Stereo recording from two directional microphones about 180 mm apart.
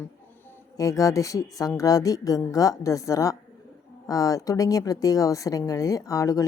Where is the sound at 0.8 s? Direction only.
20° left (ahead or behind).